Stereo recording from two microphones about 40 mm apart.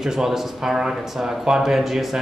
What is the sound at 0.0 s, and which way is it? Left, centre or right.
Speech, centre.